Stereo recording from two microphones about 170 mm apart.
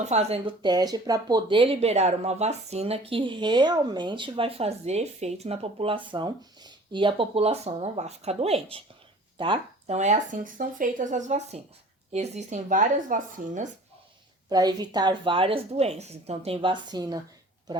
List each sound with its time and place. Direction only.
0.0 s speech: 40° right (ahead or behind)
14.5 s a woman's voice: 25° right (ahead or behind)